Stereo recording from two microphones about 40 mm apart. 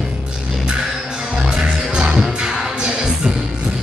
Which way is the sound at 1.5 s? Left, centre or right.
Right.